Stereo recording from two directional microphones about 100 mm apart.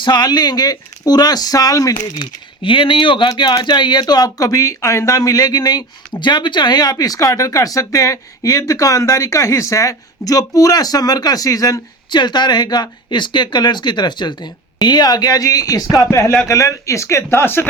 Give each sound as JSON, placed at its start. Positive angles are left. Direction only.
{"t": 0.0, "sound": "speech", "side_deg": 45}
{"t": 2.6, "sound": "speech", "side_deg": 55}
{"t": 3.2, "sound": "speech", "side_deg": 45}